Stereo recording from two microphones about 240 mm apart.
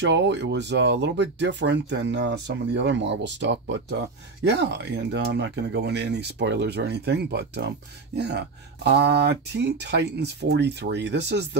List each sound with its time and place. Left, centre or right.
0.0 s speech: right